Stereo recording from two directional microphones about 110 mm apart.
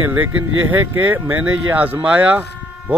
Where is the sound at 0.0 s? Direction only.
15° right (ahead or behind).